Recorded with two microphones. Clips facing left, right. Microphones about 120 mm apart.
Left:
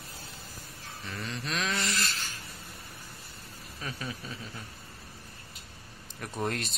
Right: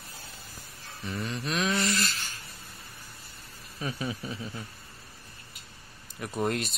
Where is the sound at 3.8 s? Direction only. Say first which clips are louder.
Right 5 dB; 20° right (ahead or behind).